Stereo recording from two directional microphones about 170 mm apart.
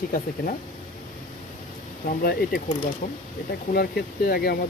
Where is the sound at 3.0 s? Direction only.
50° left (ahead or behind).